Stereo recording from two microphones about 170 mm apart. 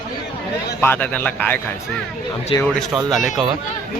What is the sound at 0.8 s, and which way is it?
Speech, 10° left (ahead or behind).